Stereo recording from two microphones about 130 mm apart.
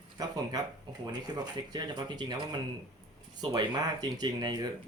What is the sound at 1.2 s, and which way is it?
Speech, 30° right (ahead or behind).